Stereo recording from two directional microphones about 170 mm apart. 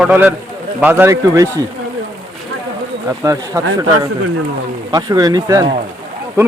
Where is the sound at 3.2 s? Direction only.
20° right (ahead or behind).